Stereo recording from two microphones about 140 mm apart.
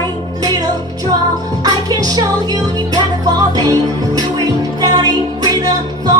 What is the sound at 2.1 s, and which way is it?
Music, 30° right (ahead or behind).